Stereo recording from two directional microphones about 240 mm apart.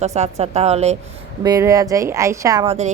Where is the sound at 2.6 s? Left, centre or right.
Right.